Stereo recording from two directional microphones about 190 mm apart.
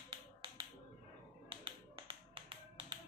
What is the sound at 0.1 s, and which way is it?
Music, 25° right (ahead or behind).